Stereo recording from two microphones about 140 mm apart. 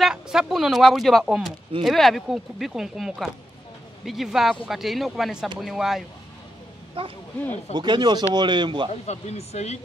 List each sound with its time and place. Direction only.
0.0 s speech: 5° right (ahead or behind)
7.0 s speech: 40° right (ahead or behind)
9.0 s speech: 50° left (ahead or behind)